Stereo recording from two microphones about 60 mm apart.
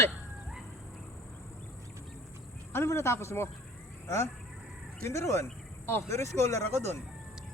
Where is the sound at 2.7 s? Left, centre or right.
Left.